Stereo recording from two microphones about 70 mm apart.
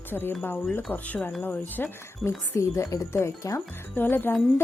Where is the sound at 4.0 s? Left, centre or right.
Left.